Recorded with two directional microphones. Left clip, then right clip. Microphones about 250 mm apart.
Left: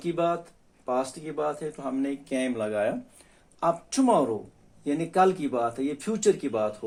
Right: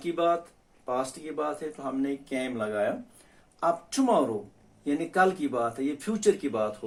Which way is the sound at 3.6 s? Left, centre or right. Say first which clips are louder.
Left 1 dB; left.